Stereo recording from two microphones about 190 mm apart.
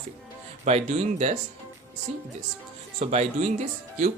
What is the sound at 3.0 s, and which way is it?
Speech, 35° right (ahead or behind).